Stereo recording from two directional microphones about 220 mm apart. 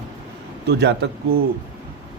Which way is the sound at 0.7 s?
50° right (ahead or behind).